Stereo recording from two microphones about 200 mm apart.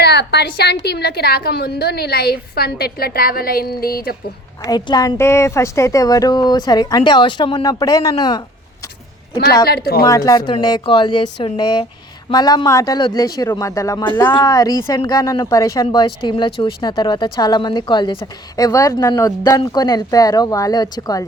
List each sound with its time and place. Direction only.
0.0 s a woman's voice: 55° left (ahead or behind)
4.6 s a woman's voice: 20° left (ahead or behind)
9.6 s a woman's voice: 50° left (ahead or behind)
10.1 s a woman's voice: 15° left (ahead or behind)